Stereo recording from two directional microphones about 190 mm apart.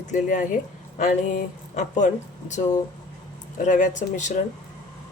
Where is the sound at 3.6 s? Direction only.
40° left (ahead or behind).